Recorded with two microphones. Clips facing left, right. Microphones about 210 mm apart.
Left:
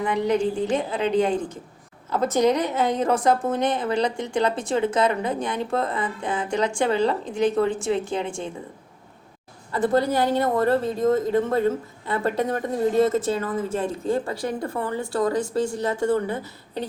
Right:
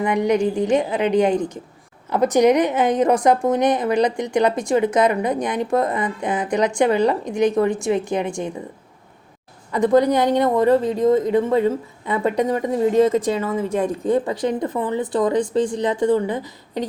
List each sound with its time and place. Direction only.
0.0 s a woman's voice: 15° right (ahead or behind)
9.7 s a woman's voice: 15° right (ahead or behind)